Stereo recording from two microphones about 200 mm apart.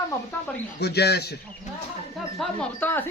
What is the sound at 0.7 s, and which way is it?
Speech, 55° left (ahead or behind).